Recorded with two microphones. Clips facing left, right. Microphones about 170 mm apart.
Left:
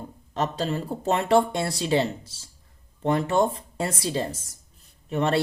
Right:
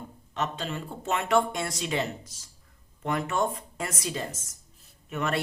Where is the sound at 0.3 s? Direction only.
35° left (ahead or behind).